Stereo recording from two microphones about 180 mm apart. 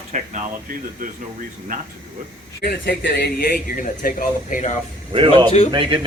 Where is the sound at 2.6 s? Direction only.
65° left (ahead or behind); by 4.8 s 45° left (ahead or behind).